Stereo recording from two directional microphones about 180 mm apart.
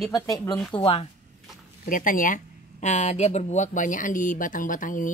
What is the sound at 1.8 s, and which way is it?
Speech, 50° left (ahead or behind).